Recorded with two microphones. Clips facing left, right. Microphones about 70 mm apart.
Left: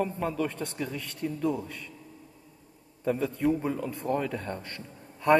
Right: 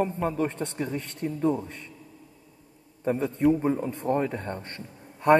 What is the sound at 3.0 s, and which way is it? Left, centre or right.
A man's voice, right.